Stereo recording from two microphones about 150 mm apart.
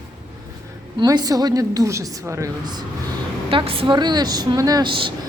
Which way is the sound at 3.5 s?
35° right (ahead or behind).